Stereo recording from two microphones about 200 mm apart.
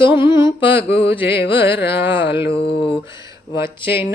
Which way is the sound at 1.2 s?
55° left (ahead or behind).